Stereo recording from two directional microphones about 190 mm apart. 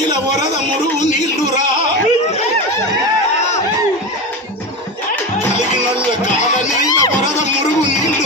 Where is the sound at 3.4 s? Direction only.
35° left (ahead or behind).